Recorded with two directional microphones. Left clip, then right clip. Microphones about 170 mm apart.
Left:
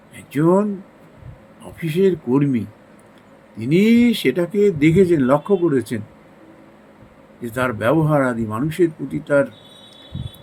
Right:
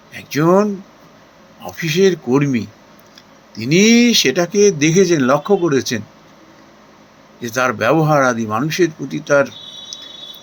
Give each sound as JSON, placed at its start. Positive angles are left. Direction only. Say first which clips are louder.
{"t": 0.1, "sound": "speech", "louder": "right 3 dB", "side_deg": 15}
{"t": 7.4, "sound": "speech", "louder": "right 4 dB", "side_deg": 15}